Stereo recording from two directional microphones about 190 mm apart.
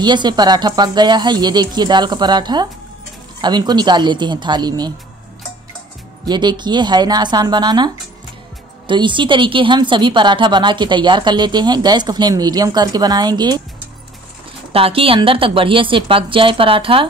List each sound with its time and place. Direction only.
0.0 s a woman's voice: 25° right (ahead or behind)
6.2 s a woman's voice: 25° right (ahead or behind)
14.7 s a woman's voice: 30° right (ahead or behind)